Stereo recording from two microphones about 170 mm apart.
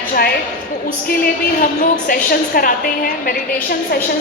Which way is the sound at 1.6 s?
55° left (ahead or behind).